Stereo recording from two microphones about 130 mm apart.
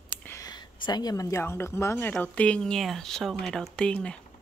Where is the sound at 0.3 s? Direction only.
30° left (ahead or behind); by 4.2 s 10° left (ahead or behind).